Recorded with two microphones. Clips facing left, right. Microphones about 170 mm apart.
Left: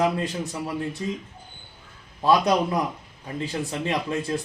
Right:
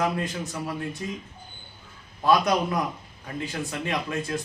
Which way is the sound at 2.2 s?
30° left (ahead or behind).